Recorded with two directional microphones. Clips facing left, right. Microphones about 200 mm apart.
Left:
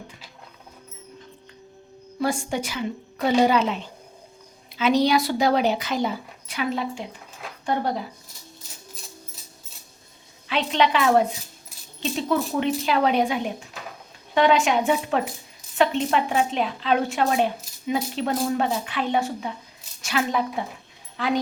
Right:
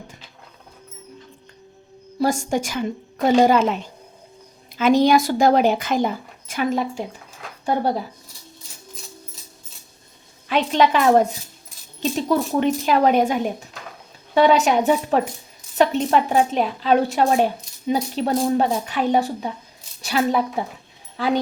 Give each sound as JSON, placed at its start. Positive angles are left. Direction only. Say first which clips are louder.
{"t": 2.1, "sound": "a woman's voice", "louder": "right 4 dB", "side_deg": -40}
{"t": 4.8, "sound": "a woman's voice", "louder": "right 4 dB", "side_deg": -50}
{"t": 10.5, "sound": "a woman's voice", "louder": "right 4 dB", "side_deg": -45}